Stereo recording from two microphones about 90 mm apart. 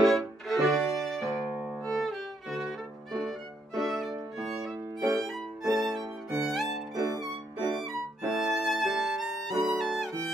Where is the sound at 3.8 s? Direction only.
Centre (ahead or behind).